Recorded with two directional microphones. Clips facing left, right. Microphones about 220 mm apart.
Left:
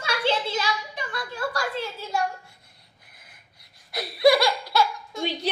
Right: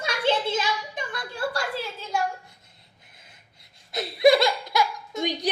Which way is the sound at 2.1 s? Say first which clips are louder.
Even; centre (ahead or behind).